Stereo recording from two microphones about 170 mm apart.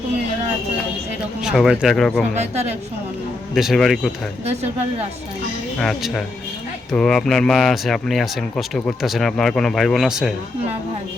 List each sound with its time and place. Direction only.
1.4 s speech: 5° right (ahead or behind)
2.3 s speech: 40° right (ahead or behind)
3.5 s speech: centre (ahead or behind)
5.8 s speech: 5° left (ahead or behind)